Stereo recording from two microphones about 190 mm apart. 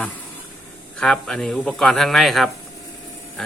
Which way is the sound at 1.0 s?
5° left (ahead or behind).